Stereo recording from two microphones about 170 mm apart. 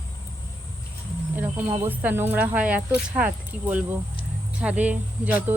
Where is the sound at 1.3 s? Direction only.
10° right (ahead or behind).